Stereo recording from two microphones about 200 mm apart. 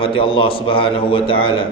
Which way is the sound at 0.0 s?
25° left (ahead or behind).